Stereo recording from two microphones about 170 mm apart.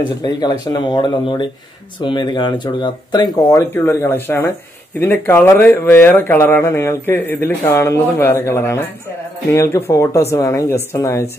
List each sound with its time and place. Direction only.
0.2 s speech: 25° left (ahead or behind)